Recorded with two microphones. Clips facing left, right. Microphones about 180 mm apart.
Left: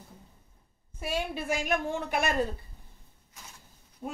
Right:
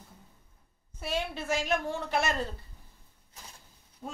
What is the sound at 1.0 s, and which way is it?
A woman's voice, 10° left (ahead or behind).